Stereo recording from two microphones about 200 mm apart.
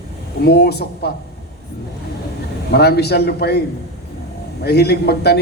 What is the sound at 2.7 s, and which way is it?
Speech, 55° left (ahead or behind).